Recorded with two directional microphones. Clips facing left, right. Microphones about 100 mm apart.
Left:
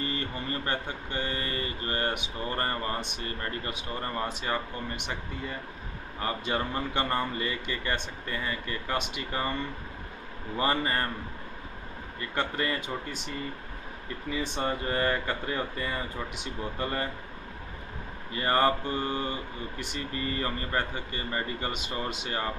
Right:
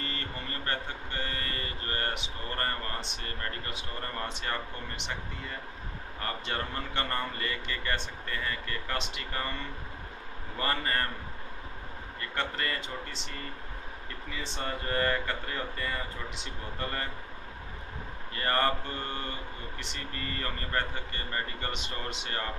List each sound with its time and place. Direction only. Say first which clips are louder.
0.0 s speech: left 5 dB; 15° left (ahead or behind)
6.2 s speech: left 5 dB; 15° left (ahead or behind)
10.6 s speech: left 3 dB; 15° left (ahead or behind)
12.2 s speech: left 3 dB; 15° left (ahead or behind)
14.4 s speech: left 4 dB; 15° left (ahead or behind)
18.3 s speech: left 4 dB; 15° left (ahead or behind)